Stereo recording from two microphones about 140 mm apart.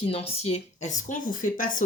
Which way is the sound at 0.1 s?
45° left (ahead or behind).